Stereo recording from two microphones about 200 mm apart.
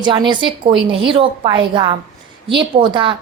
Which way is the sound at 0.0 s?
20° right (ahead or behind).